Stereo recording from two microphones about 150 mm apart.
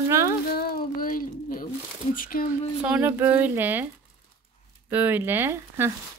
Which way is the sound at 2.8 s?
10° right (ahead or behind).